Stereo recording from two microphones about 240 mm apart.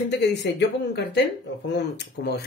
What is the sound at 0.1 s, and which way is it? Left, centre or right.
Speech, left.